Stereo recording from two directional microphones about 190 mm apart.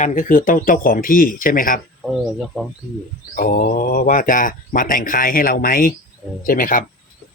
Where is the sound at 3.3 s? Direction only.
50° left (ahead or behind).